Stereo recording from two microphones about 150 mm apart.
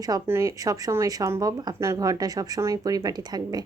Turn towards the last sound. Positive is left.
turn(degrees=-25)  # may be behind; listen again after turning